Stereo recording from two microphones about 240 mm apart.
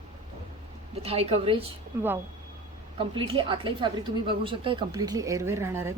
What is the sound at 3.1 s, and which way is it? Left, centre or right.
Speech, right.